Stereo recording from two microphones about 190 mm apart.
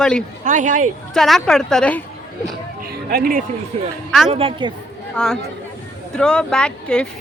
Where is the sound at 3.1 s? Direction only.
50° right (ahead or behind).